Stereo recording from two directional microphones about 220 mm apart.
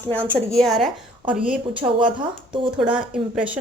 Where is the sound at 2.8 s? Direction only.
5° right (ahead or behind).